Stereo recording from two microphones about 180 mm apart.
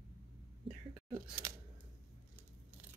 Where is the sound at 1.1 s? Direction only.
15° right (ahead or behind).